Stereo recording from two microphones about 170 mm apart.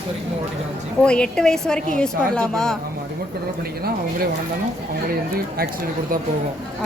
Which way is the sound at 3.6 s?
65° right (ahead or behind).